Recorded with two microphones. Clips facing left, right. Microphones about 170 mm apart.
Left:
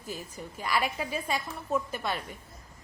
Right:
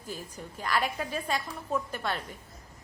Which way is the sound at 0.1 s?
10° left (ahead or behind).